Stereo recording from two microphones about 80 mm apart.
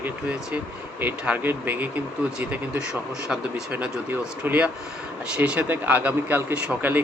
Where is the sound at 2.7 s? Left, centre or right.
Centre.